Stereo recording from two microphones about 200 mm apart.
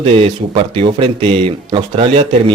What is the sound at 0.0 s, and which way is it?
Speech, 25° right (ahead or behind).